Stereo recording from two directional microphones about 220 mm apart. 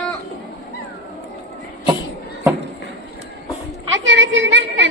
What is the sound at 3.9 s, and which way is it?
Speech, 55° right (ahead or behind).